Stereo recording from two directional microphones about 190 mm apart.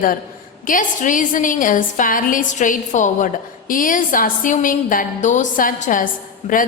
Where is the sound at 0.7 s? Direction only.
45° left (ahead or behind).